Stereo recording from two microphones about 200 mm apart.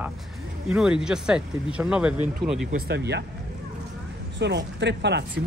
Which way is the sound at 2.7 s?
55° right (ahead or behind).